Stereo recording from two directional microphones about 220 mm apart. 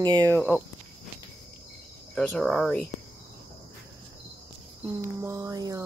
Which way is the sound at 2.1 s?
Centre (ahead or behind).